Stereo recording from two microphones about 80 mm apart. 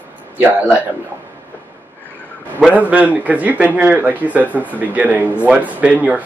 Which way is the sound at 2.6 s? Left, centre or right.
Centre.